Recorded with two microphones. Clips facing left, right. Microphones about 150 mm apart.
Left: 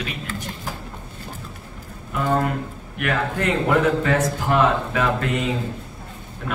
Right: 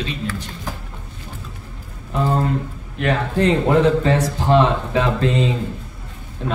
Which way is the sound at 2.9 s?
25° right (ahead or behind).